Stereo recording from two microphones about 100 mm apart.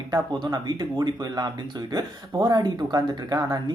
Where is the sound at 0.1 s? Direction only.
45° right (ahead or behind).